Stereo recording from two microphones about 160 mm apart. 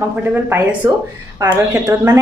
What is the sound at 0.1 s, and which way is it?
A woman's voice, 10° right (ahead or behind).